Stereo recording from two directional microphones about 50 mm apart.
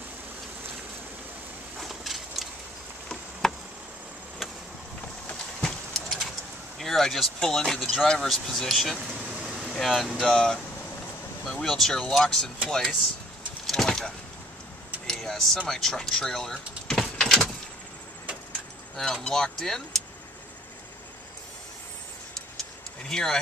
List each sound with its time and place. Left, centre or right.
1.8 s a sound: centre
3.4 s a sound: centre
5.6 s horse: centre
6.8 s speech: centre
8.9 s air conditioning: centre
9.6 s air conditioning: centre
10.1 s speech: centre
13.7 s a sound: centre
15.0 s speech: centre
19.2 s speech: centre
23.0 s speech: centre